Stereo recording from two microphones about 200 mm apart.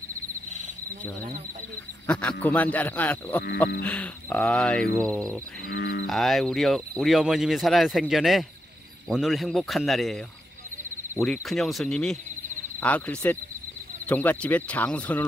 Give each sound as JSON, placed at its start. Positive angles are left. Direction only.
{"t": 2.0, "sound": "speech", "side_deg": 5}
{"t": 11.4, "sound": "speech", "side_deg": 0}